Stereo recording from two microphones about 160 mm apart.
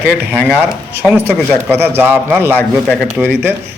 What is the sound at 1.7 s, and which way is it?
Speech, 15° right (ahead or behind).